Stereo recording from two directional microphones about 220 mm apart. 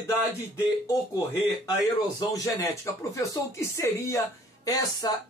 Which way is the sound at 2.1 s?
15° left (ahead or behind).